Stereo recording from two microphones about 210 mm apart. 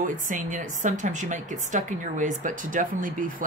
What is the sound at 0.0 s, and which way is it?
A woman's voice, 40° right (ahead or behind).